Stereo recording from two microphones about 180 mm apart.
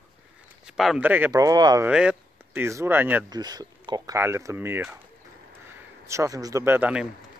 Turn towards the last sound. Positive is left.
turn(degrees=-10)  # may be behind; listen again after turning